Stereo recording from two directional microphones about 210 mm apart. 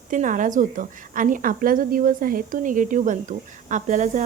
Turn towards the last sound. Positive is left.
turn(degrees=-35)  # may be behind; listen again after turning